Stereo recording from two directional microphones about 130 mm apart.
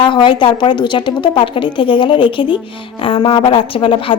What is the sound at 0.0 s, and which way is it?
A woman's voice, 40° left (ahead or behind).